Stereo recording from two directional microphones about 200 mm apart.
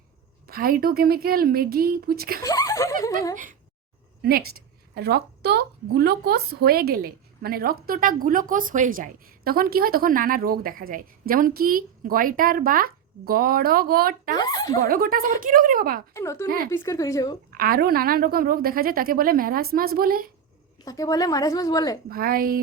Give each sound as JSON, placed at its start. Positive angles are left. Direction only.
{"t": 0.4, "sound": "speech", "side_deg": -45}
{"t": 2.4, "sound": "a woman's voice", "side_deg": 15}
{"t": 4.2, "sound": "speech", "side_deg": -50}
{"t": 14.3, "sound": "speech", "side_deg": 20}
{"t": 14.8, "sound": "speech", "side_deg": -45}
{"t": 16.1, "sound": "a woman's voice", "side_deg": 15}
{"t": 17.5, "sound": "speech", "side_deg": -45}
{"t": 20.8, "sound": "a woman's voice", "side_deg": 20}
{"t": 22.1, "sound": "speech", "side_deg": -45}